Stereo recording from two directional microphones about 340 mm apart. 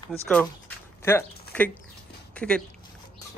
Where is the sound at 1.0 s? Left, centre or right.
Centre.